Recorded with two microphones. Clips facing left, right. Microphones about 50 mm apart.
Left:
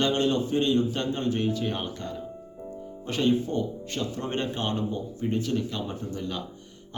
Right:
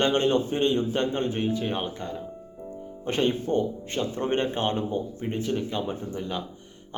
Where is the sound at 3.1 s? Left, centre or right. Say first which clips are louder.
Even; right.